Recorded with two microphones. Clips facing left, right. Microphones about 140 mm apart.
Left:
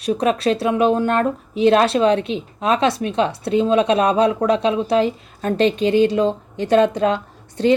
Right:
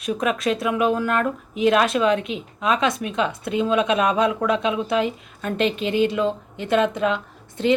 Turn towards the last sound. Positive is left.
turn(degrees=35)  # may be behind; listen again after turning